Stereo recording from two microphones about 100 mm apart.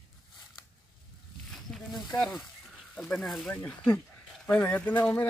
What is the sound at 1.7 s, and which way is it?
Speech, 5° left (ahead or behind).